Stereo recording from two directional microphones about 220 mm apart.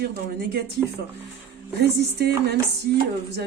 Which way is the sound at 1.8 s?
50° right (ahead or behind).